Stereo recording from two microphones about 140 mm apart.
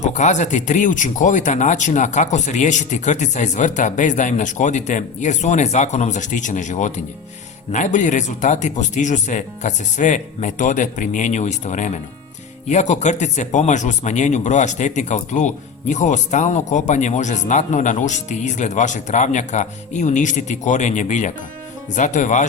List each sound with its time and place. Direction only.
0.0 s speech: 60° left (ahead or behind)